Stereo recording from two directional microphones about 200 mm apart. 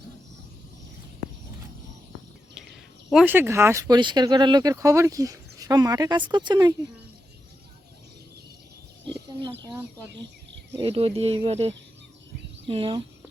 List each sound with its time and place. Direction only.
3.1 s speech: 5° right (ahead or behind)
9.5 s speech: 10° right (ahead or behind)
10.8 s speech: 30° right (ahead or behind)